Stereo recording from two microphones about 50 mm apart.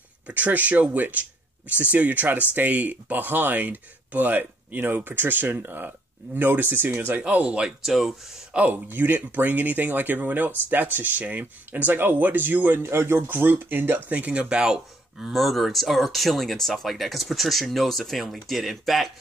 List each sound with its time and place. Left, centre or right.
0.3 s speech: right
7.2 s speech: right
7.6 s speech: centre
8.5 s speech: right
12.8 s speech: right
13.3 s speech: right
14.1 s speech: right; by 15.3 s centre
15.3 s speech: centre